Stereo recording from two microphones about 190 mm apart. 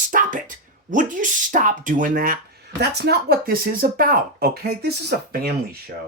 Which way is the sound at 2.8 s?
60° right (ahead or behind).